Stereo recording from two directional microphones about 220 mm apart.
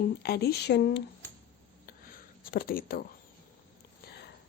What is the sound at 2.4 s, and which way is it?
Speech, 40° left (ahead or behind).